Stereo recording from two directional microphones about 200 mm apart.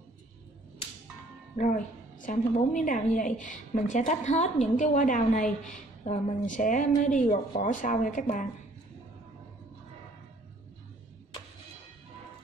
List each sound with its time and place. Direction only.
1.6 s a woman's voice: 40° left (ahead or behind)